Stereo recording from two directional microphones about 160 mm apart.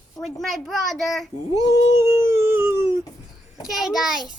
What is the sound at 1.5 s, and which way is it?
Speech, 20° right (ahead or behind).